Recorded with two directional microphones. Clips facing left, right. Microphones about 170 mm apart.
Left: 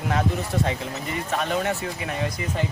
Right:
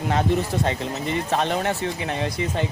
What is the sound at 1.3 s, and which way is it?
Speech, 30° right (ahead or behind).